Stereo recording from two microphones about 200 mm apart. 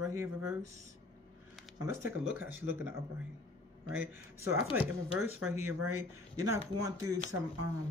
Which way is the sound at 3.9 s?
15° right (ahead or behind).